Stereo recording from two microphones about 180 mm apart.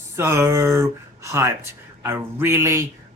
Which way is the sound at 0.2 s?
15° right (ahead or behind).